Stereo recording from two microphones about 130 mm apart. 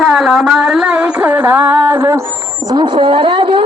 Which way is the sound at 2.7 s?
35° right (ahead or behind).